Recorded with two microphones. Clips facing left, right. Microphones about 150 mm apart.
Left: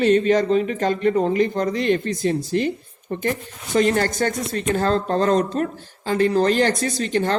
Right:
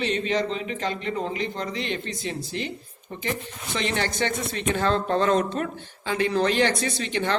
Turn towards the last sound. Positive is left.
turn(degrees=45)  # may be behind; listen again after turning